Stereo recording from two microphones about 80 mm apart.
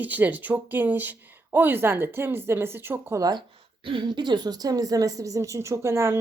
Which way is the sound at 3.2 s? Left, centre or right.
Right.